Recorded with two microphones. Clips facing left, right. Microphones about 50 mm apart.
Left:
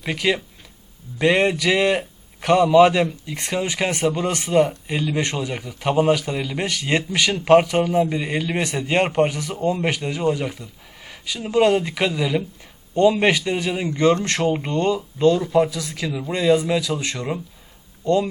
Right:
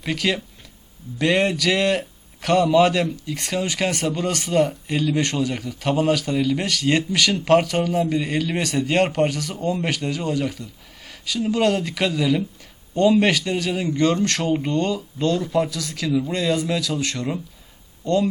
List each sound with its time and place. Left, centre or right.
0.0 s a man's voice: centre